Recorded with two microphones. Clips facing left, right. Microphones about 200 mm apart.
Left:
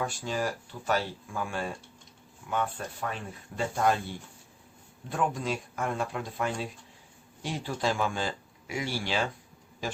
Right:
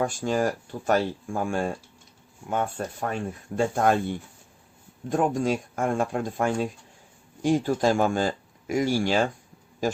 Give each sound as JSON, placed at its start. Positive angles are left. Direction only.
{"t": 0.0, "sound": "speech", "side_deg": -50}
{"t": 5.0, "sound": "speech", "side_deg": -45}